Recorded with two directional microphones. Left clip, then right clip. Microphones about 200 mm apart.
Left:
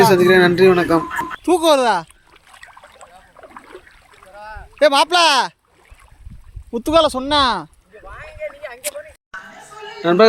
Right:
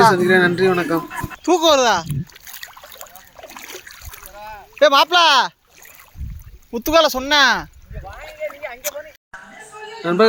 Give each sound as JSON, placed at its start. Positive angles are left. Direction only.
{"t": 0.0, "sound": "speech", "side_deg": 10}
{"t": 1.5, "sound": "speech", "side_deg": 20}
{"t": 2.0, "sound": "a sound", "side_deg": -55}
{"t": 4.3, "sound": "rowboat", "side_deg": 10}
{"t": 4.8, "sound": "speech", "side_deg": 25}
{"t": 6.7, "sound": "speech", "side_deg": 25}
{"t": 8.2, "sound": "a sound", "side_deg": -60}
{"t": 8.8, "sound": "speech", "side_deg": 25}
{"t": 10.0, "sound": "speech", "side_deg": 5}